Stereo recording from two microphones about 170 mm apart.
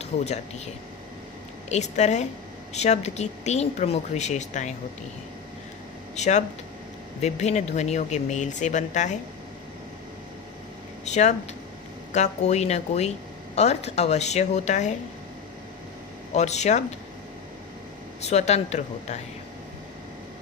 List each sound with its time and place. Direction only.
0.0 s speech: 40° left (ahead or behind)
1.7 s speech: 45° left (ahead or behind)
6.1 s speech: 40° left (ahead or behind)
11.0 s speech: 40° left (ahead or behind)
16.3 s speech: 40° left (ahead or behind)
18.2 s speech: 40° left (ahead or behind)